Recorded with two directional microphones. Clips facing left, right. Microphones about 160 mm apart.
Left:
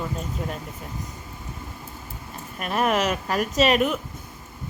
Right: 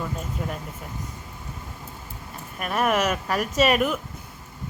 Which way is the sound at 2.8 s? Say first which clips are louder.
Even; 5° right (ahead or behind).